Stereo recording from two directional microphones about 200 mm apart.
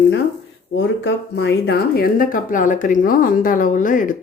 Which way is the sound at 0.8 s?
60° left (ahead or behind).